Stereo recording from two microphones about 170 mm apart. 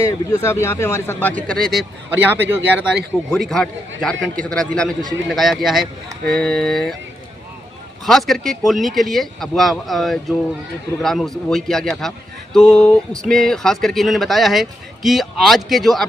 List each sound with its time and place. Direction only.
0.0 s a man's voice: 20° left (ahead or behind); by 1.9 s centre (ahead or behind)
2.0 s speech: 10° right (ahead or behind)
3.2 s speech: centre (ahead or behind)
8.0 s speech: centre (ahead or behind)